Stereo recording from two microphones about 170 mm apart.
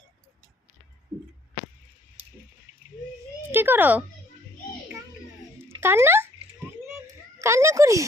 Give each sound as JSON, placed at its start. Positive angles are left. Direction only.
{"t": 2.2, "sound": "a sound", "side_deg": -35}
{"t": 3.5, "sound": "speech", "side_deg": -10}
{"t": 5.8, "sound": "speech", "side_deg": -15}
{"t": 7.3, "sound": "speech", "side_deg": -15}